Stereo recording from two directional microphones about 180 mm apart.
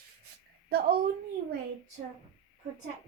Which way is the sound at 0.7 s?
55° right (ahead or behind).